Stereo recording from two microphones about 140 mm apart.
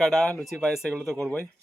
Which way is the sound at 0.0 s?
5° left (ahead or behind).